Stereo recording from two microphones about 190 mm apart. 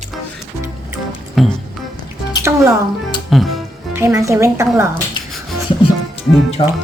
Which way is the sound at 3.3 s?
Centre (ahead or behind).